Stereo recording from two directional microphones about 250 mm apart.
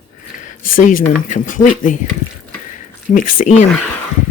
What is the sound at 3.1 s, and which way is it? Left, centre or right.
Speech, left.